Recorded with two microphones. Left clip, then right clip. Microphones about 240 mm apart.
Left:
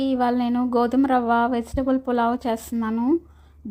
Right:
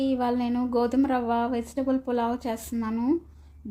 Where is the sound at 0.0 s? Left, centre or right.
Centre.